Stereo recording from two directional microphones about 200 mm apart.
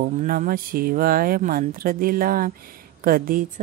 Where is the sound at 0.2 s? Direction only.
40° right (ahead or behind).